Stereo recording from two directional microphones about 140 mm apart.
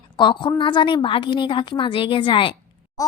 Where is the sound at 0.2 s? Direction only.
35° left (ahead or behind).